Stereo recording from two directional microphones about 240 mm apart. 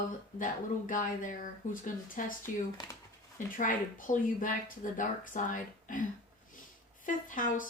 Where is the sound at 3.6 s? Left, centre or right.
Left.